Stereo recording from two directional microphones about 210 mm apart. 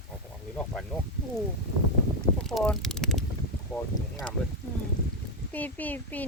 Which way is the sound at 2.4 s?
Centre (ahead or behind).